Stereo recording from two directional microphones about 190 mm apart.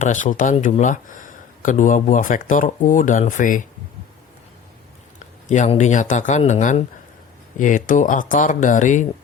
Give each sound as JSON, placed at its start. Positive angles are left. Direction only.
{"t": 0.0, "sound": "speech", "side_deg": 40}
{"t": 5.5, "sound": "speech", "side_deg": 40}